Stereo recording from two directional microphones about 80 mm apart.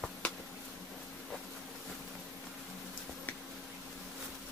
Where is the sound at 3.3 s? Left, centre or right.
Left.